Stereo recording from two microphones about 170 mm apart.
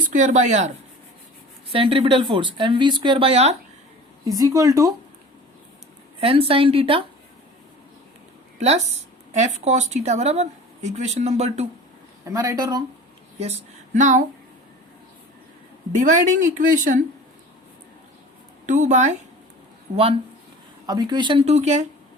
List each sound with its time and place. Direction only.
0.1 s speech: 45° right (ahead or behind)
1.7 s speech: 30° right (ahead or behind)
4.3 s speech: 20° right (ahead or behind)
6.1 s speech: 35° right (ahead or behind)
9.3 s speech: 40° right (ahead or behind)
12.2 s speech: 20° right (ahead or behind)
13.4 s a sound: 40° right (ahead or behind)
16.0 s speech: 50° right (ahead or behind)
18.6 s speech: 45° right (ahead or behind)
20.8 s speech: 25° right (ahead or behind); by 21.8 s 40° right (ahead or behind)